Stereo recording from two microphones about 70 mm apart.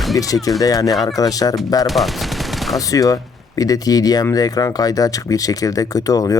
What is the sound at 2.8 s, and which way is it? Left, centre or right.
Speech, left.